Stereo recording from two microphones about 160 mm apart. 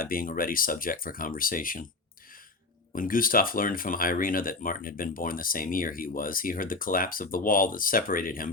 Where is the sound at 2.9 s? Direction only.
60° left (ahead or behind).